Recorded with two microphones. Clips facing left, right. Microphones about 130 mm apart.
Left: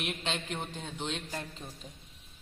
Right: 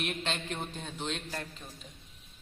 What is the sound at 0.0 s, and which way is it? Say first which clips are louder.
A man's voice: right 1 dB; 15° left (ahead or behind).